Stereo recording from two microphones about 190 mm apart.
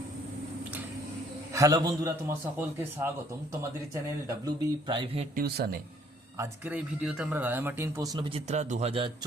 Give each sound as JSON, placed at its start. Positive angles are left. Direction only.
{"t": 1.5, "sound": "speech", "side_deg": -15}
{"t": 5.3, "sound": "speech", "side_deg": -50}
{"t": 6.3, "sound": "speech", "side_deg": -10}